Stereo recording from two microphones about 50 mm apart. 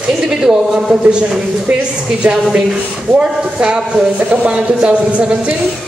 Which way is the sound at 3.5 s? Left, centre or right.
Centre.